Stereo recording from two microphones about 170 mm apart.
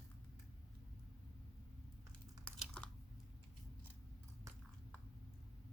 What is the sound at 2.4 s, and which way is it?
Chewing, 5° left (ahead or behind).